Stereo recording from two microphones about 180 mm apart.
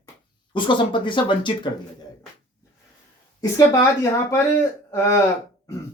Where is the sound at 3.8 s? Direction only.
15° left (ahead or behind).